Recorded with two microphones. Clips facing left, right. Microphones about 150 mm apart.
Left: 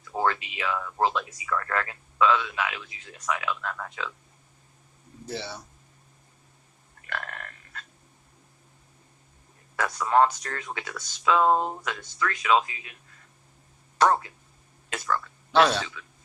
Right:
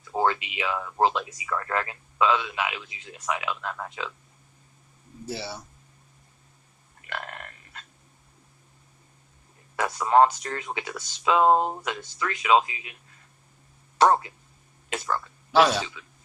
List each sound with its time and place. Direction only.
0.1 s speech: 15° right (ahead or behind)
5.2 s speech: 10° right (ahead or behind)
7.1 s burping: 20° right (ahead or behind)
9.7 s speech: 20° right (ahead or behind)
14.0 s speech: 15° right (ahead or behind)
15.5 s speech: 5° right (ahead or behind)